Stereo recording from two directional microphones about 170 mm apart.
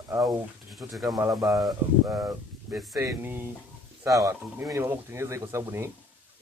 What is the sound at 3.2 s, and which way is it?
Speech, 15° right (ahead or behind).